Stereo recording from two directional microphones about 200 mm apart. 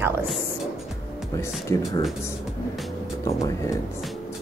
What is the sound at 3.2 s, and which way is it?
Speech, 15° left (ahead or behind).